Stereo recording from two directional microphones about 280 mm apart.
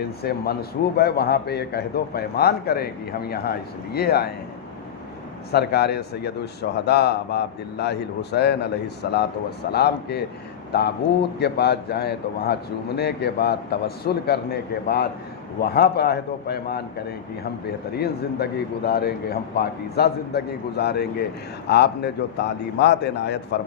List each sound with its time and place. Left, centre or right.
0.2 s a man's voice: left
5.5 s a man's voice: left
9.7 s a man's voice: left
17.9 s a man's voice: left